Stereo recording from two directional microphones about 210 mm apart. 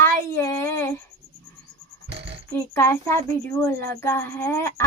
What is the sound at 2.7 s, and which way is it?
Speech, 10° left (ahead or behind).